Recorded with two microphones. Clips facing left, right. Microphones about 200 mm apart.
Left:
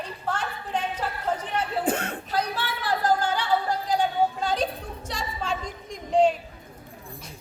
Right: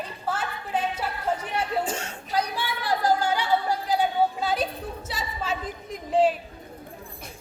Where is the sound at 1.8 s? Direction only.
60° left (ahead or behind).